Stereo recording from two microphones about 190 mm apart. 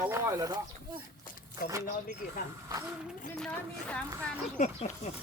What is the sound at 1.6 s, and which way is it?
Speech, 50° left (ahead or behind).